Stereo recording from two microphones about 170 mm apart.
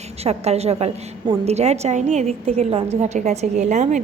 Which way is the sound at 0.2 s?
40° right (ahead or behind).